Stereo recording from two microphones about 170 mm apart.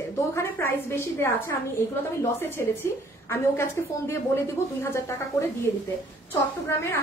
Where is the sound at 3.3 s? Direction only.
15° left (ahead or behind).